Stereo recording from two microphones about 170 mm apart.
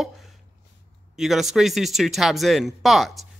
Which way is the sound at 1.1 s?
Centre (ahead or behind).